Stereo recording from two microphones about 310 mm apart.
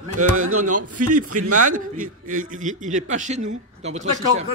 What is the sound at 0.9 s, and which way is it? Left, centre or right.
Speech, right.